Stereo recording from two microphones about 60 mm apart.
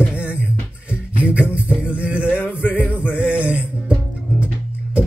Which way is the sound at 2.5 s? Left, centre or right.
Left.